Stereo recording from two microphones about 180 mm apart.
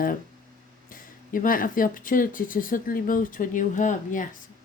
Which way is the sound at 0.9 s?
50° left (ahead or behind).